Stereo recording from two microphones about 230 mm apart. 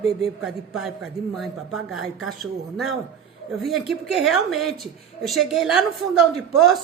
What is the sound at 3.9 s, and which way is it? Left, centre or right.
A woman's voice, centre.